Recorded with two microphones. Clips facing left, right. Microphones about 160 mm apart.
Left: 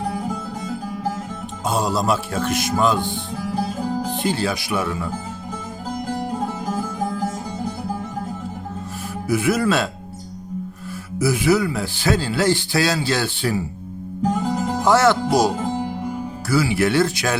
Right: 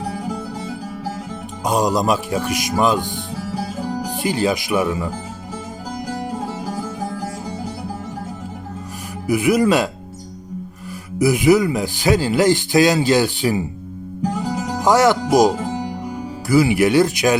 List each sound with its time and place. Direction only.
1.6 s speech: 15° right (ahead or behind)
4.1 s speech: 10° right (ahead or behind)
9.2 s speech: 15° right (ahead or behind)
11.2 s speech: 15° right (ahead or behind)
14.8 s speech: 15° right (ahead or behind)